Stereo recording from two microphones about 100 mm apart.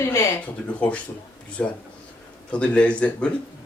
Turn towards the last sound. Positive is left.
turn(degrees=10)  # may be behind; listen again after turning